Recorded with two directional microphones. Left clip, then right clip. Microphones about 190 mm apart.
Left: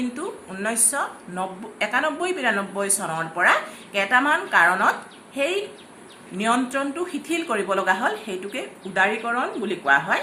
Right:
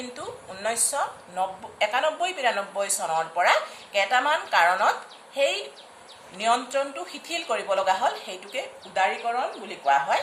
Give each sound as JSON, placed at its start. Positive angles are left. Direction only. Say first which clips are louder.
{"t": 0.6, "sound": "a woman's voice", "louder": "left 1 dB", "side_deg": 0}